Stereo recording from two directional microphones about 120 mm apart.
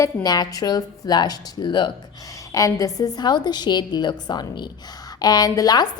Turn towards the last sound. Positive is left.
turn(degrees=35)  # may be behind; listen again after turning